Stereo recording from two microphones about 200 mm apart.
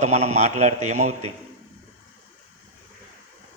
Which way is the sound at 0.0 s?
35° right (ahead or behind).